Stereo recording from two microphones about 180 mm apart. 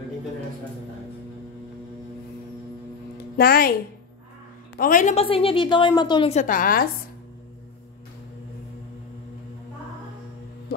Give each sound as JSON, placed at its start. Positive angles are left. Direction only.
{"t": 3.3, "sound": "speech", "side_deg": 55}
{"t": 4.7, "sound": "a woman's voice", "side_deg": 50}
{"t": 6.3, "sound": "a woman's voice", "side_deg": 45}